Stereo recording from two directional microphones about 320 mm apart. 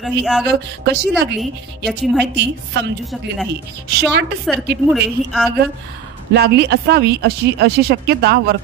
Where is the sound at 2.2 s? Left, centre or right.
Right.